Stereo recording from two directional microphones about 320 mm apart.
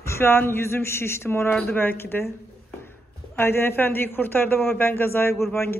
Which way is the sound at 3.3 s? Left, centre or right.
Centre.